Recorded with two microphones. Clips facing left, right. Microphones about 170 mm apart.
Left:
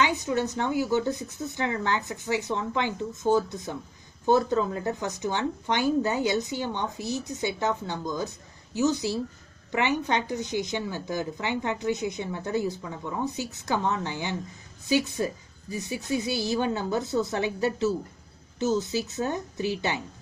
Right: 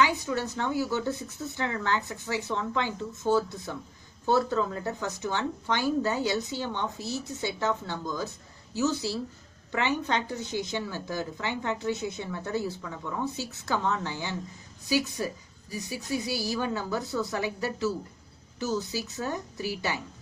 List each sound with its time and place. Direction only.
0.0 s a woman's voice: 20° left (ahead or behind)